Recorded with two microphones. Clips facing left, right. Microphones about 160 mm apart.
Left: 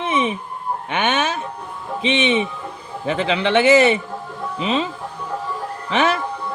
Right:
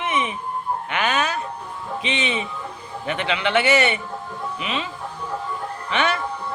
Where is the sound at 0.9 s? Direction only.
25° left (ahead or behind).